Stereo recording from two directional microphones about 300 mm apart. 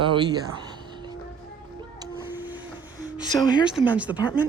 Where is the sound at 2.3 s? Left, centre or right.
Centre.